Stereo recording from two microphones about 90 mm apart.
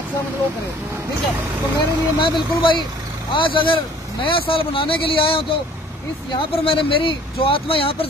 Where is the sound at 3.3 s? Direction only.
75° left (ahead or behind); by 5.4 s 90° left.